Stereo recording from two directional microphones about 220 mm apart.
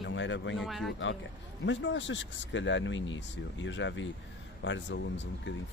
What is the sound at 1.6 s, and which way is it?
Speech, 55° left (ahead or behind).